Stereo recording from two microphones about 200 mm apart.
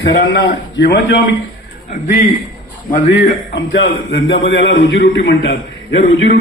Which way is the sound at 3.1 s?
60° left (ahead or behind).